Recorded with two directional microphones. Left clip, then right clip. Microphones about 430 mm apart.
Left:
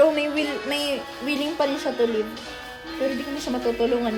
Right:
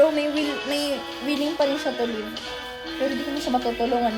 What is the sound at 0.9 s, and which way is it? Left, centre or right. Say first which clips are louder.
Speech: even; right.